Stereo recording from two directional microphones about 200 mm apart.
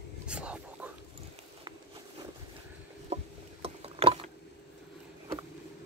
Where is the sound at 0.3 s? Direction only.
5° right (ahead or behind).